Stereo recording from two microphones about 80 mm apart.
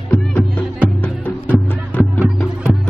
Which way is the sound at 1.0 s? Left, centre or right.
Centre.